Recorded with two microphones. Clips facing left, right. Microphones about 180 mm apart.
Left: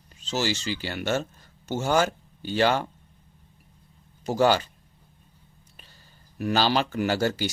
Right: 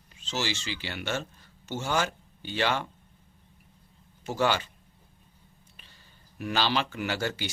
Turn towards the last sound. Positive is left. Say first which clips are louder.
# left 6 dB
turn(degrees=40)  # may be behind; listen again after turning